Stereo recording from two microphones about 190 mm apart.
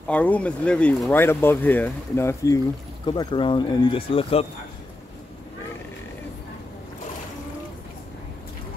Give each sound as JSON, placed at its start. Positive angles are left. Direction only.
{"t": 0.1, "sound": "speech", "side_deg": 5}